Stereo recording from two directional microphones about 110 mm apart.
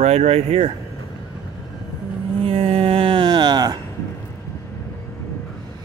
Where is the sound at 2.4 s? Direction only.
55° right (ahead or behind); by 3.8 s 40° right (ahead or behind).